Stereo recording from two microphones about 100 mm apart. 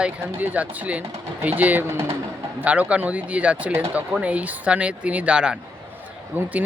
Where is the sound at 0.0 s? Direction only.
15° right (ahead or behind).